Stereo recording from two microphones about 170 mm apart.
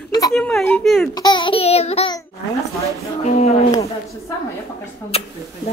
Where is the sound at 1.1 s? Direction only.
25° left (ahead or behind).